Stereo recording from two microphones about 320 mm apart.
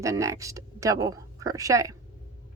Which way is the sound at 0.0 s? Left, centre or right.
Centre.